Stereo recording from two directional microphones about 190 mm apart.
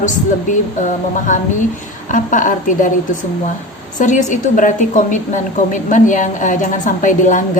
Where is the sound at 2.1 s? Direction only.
40° left (ahead or behind).